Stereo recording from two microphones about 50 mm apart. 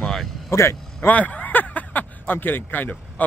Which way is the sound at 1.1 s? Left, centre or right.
Left.